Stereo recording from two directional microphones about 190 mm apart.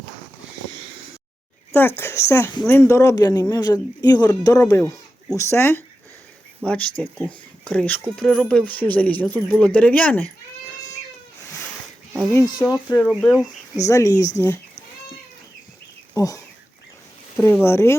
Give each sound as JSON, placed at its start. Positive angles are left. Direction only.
{"t": 1.7, "sound": "speech", "side_deg": 10}
{"t": 12.3, "sound": "speech", "side_deg": 15}
{"t": 13.0, "sound": "speech", "side_deg": 0}
{"t": 13.7, "sound": "speech", "side_deg": 15}
{"t": 16.1, "sound": "speech", "side_deg": 15}